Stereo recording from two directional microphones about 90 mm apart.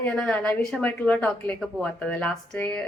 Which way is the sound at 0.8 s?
15° left (ahead or behind).